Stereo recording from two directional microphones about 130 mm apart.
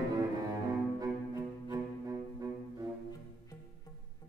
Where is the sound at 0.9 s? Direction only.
25° right (ahead or behind).